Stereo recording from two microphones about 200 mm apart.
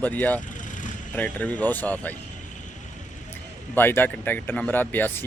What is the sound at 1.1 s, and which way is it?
Speech, 5° left (ahead or behind).